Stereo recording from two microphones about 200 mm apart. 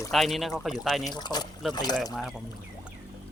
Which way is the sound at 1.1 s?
20° left (ahead or behind).